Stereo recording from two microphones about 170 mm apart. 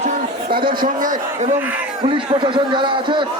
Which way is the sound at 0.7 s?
55° right (ahead or behind).